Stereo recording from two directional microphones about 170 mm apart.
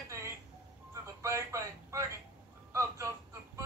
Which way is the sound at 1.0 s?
20° right (ahead or behind).